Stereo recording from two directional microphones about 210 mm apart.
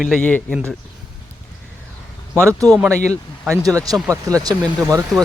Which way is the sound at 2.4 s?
10° right (ahead or behind).